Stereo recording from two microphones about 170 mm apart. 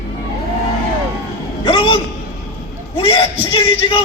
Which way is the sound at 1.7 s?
30° left (ahead or behind).